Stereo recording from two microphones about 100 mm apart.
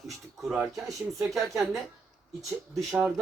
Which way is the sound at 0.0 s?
Centre (ahead or behind).